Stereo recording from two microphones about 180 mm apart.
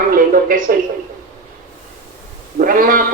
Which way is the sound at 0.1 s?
50° right (ahead or behind).